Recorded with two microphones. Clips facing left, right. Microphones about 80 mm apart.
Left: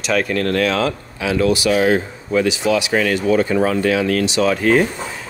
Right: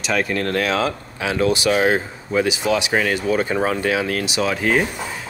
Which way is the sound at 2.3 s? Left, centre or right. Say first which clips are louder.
Left 2 dB; centre.